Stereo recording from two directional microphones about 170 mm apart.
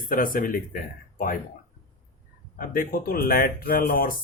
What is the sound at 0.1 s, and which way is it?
Speech, 55° left (ahead or behind).